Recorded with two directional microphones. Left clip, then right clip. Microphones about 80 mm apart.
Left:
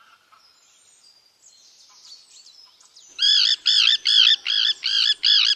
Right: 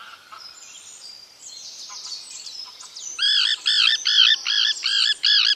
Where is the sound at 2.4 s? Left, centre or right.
Centre.